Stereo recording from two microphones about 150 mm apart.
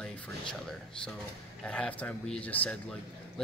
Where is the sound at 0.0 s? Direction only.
5° left (ahead or behind).